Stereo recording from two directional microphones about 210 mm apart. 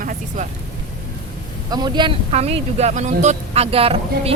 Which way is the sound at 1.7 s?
20° right (ahead or behind).